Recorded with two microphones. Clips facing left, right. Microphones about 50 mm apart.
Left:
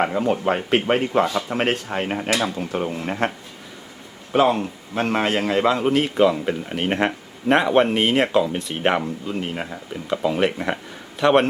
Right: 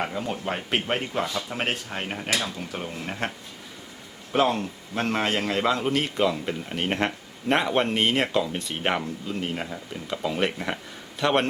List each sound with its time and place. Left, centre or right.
0.0 s speech: left
4.3 s a man's voice: centre